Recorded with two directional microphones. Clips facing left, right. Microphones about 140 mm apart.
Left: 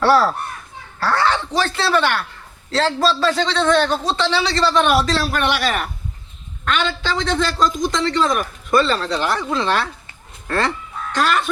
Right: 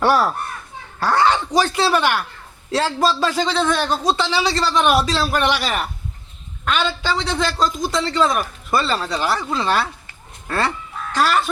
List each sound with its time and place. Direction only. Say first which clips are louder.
0.0 s a child's voice: left 2 dB; 15° right (ahead or behind)
6.7 s a man's voice: even; 10° right (ahead or behind)
11.1 s speech: even; 5° right (ahead or behind)